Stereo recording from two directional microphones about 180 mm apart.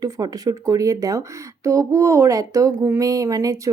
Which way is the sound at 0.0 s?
20° right (ahead or behind).